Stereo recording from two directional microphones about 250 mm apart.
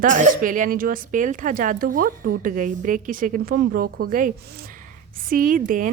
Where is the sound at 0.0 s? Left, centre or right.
Right.